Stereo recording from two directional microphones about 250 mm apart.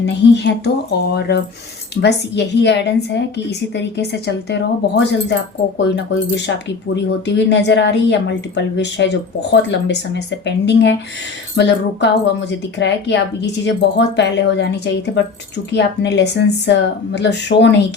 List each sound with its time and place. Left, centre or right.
0.0 s a woman's voice: left
6.9 s a woman's voice: left